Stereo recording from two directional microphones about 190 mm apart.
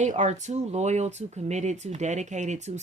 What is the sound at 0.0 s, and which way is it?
Speech, 40° right (ahead or behind).